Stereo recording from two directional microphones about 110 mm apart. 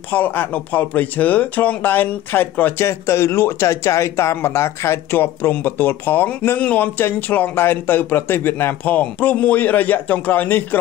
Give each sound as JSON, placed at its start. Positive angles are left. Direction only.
{"t": 0.1, "sound": "speech", "side_deg": 15}